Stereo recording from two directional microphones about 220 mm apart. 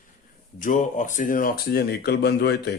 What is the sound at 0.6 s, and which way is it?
Mantra, 35° left (ahead or behind).